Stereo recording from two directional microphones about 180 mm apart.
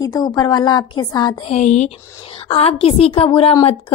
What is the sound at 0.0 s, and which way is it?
Speech, 20° left (ahead or behind).